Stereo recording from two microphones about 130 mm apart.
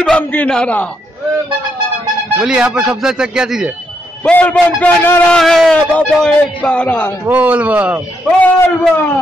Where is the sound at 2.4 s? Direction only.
5° right (ahead or behind).